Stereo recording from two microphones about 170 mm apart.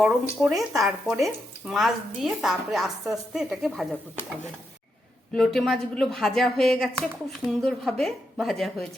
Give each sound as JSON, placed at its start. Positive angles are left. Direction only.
{"t": 0.0, "sound": "speech", "side_deg": 0}
{"t": 5.3, "sound": "speech", "side_deg": 0}